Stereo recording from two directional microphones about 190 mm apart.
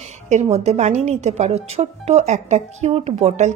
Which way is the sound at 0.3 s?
35° right (ahead or behind).